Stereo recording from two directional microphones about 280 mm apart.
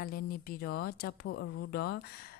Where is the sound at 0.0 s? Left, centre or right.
Left.